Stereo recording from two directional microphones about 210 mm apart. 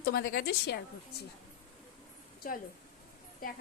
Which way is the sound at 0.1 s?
45° left (ahead or behind).